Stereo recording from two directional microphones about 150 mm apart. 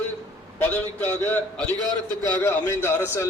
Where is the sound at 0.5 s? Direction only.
15° left (ahead or behind).